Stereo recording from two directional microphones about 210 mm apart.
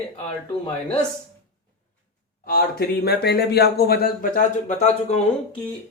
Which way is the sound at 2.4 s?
45° left (ahead or behind).